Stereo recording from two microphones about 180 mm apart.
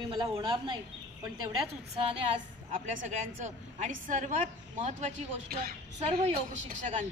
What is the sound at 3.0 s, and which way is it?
A woman's voice, 40° right (ahead or behind).